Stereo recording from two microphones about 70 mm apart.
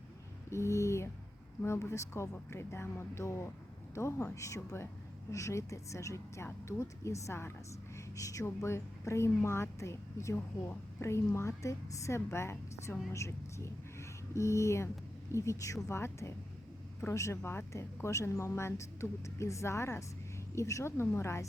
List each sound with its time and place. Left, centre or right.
0.5 s speech: left
7.9 s speech: left